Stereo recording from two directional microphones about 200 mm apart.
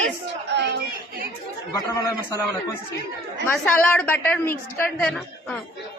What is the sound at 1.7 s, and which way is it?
Speech, 20° left (ahead or behind).